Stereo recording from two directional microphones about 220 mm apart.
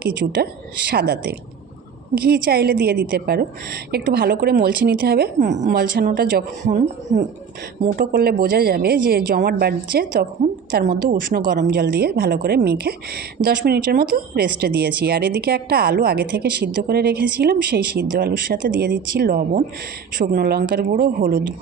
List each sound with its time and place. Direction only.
0.0 s a woman's voice: 45° right (ahead or behind)